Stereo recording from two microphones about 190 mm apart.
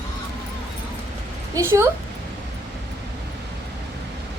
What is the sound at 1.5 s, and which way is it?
Speech, 15° right (ahead or behind).